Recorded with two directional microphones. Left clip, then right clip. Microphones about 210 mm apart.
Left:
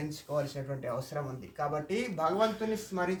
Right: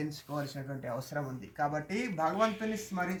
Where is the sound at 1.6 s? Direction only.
15° left (ahead or behind).